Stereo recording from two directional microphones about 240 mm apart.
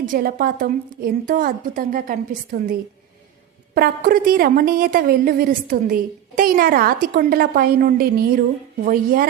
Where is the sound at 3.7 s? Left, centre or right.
Right.